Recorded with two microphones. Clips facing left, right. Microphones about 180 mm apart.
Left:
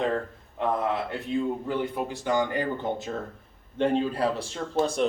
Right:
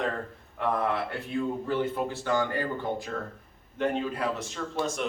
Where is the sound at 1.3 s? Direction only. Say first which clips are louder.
Left 2 dB; 15° left (ahead or behind).